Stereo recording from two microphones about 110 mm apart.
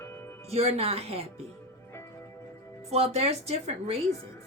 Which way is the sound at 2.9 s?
70° right (ahead or behind).